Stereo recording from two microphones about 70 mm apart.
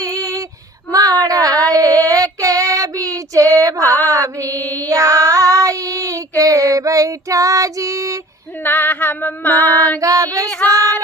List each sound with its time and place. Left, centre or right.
0.2 s female singing: right
0.9 s a sound: right
1.8 s child singing: left
2.0 s female singing: right
4.9 s child singing: right
8.6 s female singing: left
10.0 s child singing: right
10.7 s female singing: right